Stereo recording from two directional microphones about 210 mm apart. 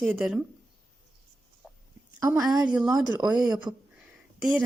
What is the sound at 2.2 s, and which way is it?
Speech, 5° right (ahead or behind).